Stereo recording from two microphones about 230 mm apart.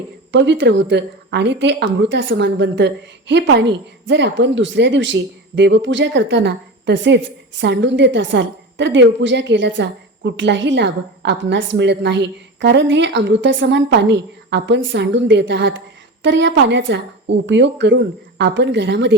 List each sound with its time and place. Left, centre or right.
0.3 s a woman's voice: right